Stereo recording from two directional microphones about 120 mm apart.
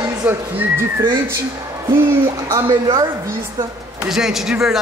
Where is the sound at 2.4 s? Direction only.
35° right (ahead or behind).